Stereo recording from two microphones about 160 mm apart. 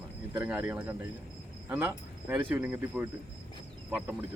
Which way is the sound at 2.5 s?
15° right (ahead or behind).